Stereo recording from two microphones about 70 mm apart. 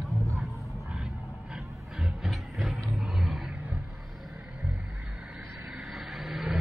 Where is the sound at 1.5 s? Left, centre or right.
Centre.